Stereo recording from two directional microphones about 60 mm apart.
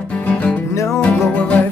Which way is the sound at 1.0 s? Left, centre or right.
Left.